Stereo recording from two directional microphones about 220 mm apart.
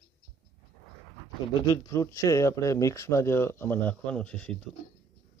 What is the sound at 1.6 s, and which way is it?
Speech, 15° left (ahead or behind).